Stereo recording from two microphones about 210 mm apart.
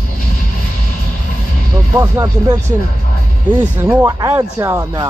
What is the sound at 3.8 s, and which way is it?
Speech, 15° right (ahead or behind).